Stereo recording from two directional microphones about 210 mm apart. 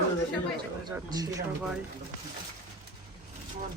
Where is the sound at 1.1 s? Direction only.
15° right (ahead or behind).